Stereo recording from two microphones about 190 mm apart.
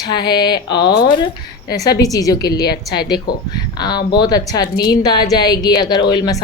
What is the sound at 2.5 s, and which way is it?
Speech, 55° left (ahead or behind).